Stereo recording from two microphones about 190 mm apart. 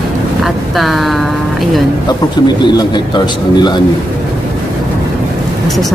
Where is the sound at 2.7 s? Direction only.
25° left (ahead or behind).